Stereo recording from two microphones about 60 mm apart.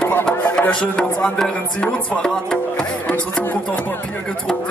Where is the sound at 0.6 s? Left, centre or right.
Centre.